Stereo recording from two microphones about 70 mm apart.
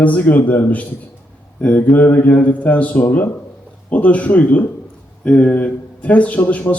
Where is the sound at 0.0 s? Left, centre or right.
Left.